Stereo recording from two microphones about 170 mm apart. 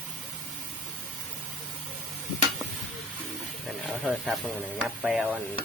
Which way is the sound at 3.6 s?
Centre (ahead or behind).